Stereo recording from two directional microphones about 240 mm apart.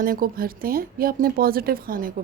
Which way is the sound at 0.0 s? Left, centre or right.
Right.